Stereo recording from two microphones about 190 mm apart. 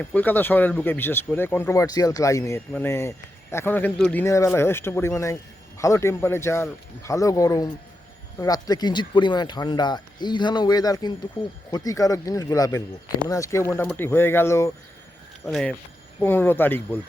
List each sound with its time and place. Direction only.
0.0 s speech: 10° left (ahead or behind)
15.4 s speech: centre (ahead or behind)
16.2 s speech: 10° left (ahead or behind)